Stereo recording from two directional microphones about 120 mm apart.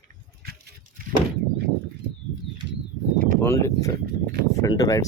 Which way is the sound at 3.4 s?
25° left (ahead or behind).